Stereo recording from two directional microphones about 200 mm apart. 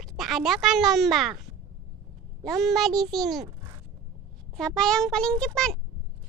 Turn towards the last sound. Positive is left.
turn(degrees=5)  # may be behind; listen again after turning